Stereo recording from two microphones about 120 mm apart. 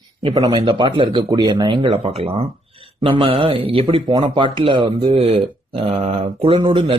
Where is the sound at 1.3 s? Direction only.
30° right (ahead or behind).